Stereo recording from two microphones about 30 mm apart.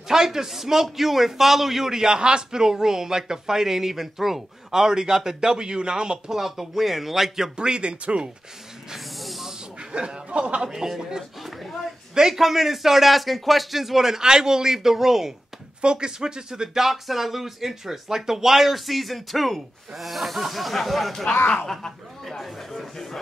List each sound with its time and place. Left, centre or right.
0.1 s a man's voice: centre
5.4 s speech: right
6.3 s a man's voice: centre
7.5 s speech: right
8.9 s snake: centre
9.9 s speech: right
10.6 s a man's voice: centre
15.8 s speech: right; by 16.9 s centre
16.9 s speech: centre
21.6 s speech: centre